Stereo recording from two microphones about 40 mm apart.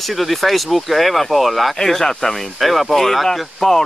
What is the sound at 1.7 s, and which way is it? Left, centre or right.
Speech, centre.